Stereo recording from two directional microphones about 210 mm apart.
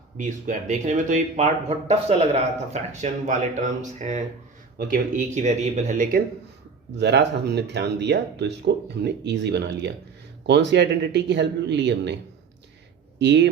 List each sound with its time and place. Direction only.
0.2 s speech: 35° right (ahead or behind)
6.9 s speech: 55° right (ahead or behind)